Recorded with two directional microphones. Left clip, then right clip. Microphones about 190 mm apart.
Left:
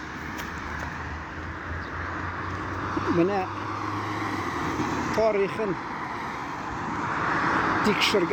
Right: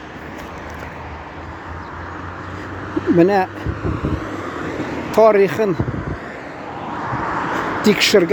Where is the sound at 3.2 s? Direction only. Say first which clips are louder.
Right 12 dB; 40° right (ahead or behind).